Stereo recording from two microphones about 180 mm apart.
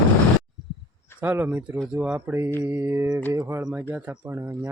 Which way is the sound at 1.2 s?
10° right (ahead or behind).